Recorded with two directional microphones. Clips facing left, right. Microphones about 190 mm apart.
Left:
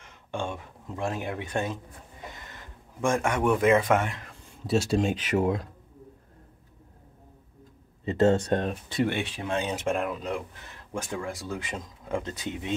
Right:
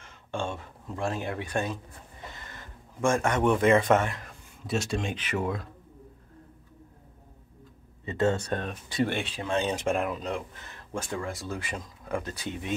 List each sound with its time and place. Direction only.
0.0 s speech: 15° left (ahead or behind)
3.0 s a man's voice: 15° left (ahead or behind)
4.7 s speech: 35° left (ahead or behind)
8.2 s speech: 20° left (ahead or behind); by 10.4 s 5° left (ahead or behind)
10.9 s speech: 15° left (ahead or behind)